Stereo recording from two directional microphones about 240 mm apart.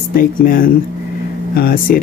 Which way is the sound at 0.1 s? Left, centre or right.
Left.